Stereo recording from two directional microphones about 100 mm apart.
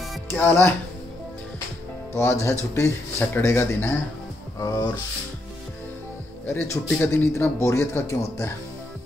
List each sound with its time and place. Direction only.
0.3 s speech: 25° left (ahead or behind)
2.4 s speech: 25° left (ahead or behind)
4.6 s speech: 35° left (ahead or behind)
6.4 s speech: 20° left (ahead or behind)